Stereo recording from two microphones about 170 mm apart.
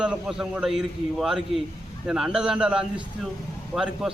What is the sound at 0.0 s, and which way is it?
A man's voice, 5° right (ahead or behind).